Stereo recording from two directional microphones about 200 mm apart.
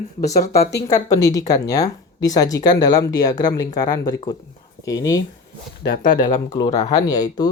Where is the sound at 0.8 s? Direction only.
15° left (ahead or behind).